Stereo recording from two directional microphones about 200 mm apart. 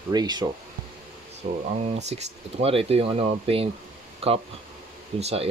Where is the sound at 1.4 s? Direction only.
30° right (ahead or behind).